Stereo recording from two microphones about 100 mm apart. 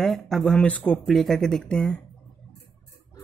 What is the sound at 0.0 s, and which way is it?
Speech, 5° left (ahead or behind).